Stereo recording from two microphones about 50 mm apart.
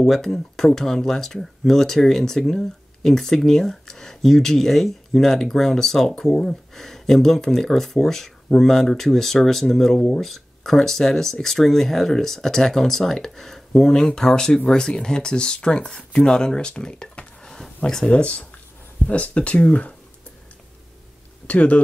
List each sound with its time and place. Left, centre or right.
0.0 s speech: centre
18.1 s speech: left
21.5 s speech: left